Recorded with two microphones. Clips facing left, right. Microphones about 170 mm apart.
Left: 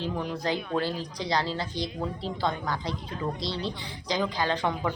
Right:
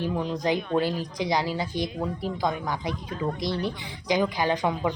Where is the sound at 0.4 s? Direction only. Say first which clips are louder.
Right 4 dB; 15° right (ahead or behind).